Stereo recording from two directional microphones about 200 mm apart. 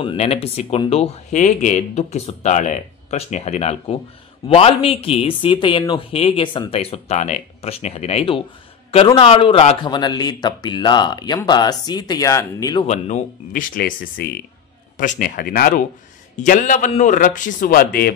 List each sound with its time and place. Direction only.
0.0 s speech: 30° left (ahead or behind)
12.8 s speech: 35° left (ahead or behind)